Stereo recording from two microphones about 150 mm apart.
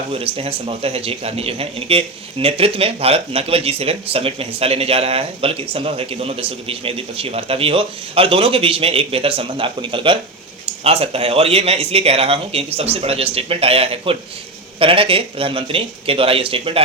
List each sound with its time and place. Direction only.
0.1 s speech: 40° right (ahead or behind)